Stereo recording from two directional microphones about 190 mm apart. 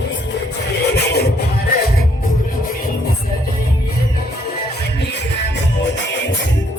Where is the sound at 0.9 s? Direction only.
60° left (ahead or behind).